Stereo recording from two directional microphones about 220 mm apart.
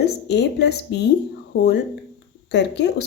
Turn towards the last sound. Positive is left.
turn(degrees=50)  # may be behind; listen again after turning